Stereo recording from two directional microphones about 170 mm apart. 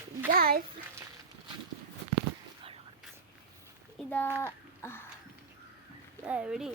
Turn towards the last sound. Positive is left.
turn(degrees=-5)  # may be behind; listen again after turning